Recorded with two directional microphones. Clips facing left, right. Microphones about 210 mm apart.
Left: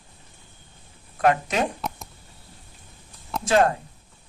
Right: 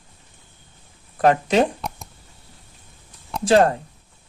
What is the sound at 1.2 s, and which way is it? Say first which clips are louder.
Speech: right 4 dB; 30° right (ahead or behind).